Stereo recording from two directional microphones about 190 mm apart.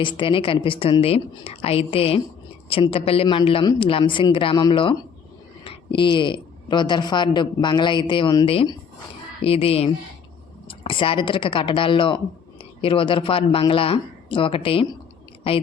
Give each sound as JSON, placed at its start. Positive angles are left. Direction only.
{"t": 0.0, "sound": "a woman's voice", "side_deg": 25}